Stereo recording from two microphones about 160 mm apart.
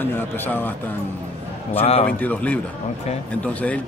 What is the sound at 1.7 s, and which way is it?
Speech, 35° left (ahead or behind).